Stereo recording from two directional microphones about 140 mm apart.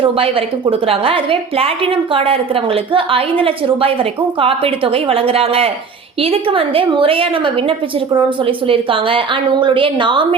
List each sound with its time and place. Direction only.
0.0 s a woman's voice: 40° right (ahead or behind)